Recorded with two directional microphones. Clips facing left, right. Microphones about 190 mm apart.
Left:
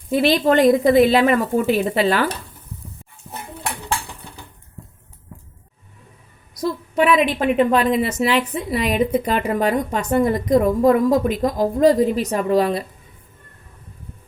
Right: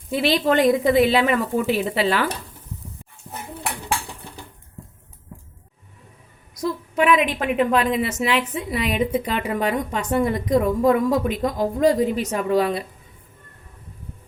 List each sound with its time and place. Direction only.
0.1 s a woman's voice: 45° left (ahead or behind)
3.3 s dishes: 5° left (ahead or behind)
6.6 s a woman's voice: 35° left (ahead or behind)